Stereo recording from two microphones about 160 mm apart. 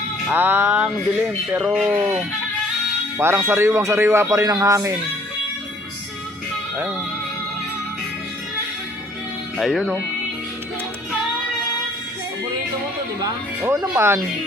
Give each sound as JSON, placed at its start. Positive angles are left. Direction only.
{"t": 0.3, "sound": "a man's voice", "side_deg": -10}
{"t": 3.2, "sound": "a man's voice", "side_deg": -15}
{"t": 9.6, "sound": "speech", "side_deg": 0}
{"t": 13.2, "sound": "a man's voice", "side_deg": -15}